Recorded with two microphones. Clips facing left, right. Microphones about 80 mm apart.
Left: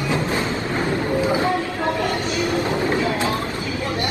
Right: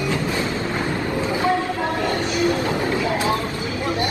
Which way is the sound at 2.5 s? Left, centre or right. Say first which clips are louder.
Left 1 dB; left.